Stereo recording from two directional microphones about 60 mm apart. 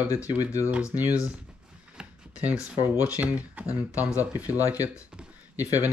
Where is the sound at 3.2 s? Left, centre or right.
Right.